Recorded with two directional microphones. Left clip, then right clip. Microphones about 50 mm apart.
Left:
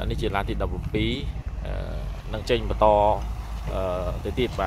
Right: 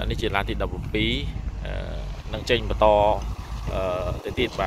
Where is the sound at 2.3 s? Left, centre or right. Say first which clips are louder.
Right 1 dB; left; by 4.1 s centre.